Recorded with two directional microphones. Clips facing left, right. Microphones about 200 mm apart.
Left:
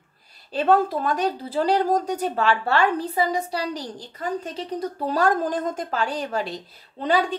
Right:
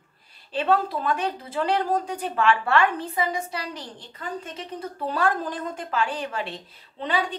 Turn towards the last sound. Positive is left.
turn(degrees=40)  # may be behind; listen again after turning